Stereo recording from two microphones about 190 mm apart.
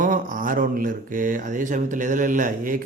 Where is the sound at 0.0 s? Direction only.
45° right (ahead or behind).